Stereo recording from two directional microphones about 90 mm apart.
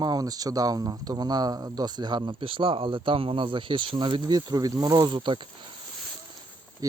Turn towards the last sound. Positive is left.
turn(degrees=-40)  # may be behind; listen again after turning